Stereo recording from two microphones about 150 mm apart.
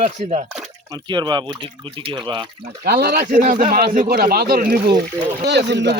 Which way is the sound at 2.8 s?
90° right.